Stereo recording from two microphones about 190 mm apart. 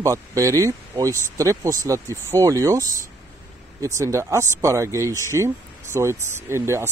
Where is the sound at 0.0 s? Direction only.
15° right (ahead or behind).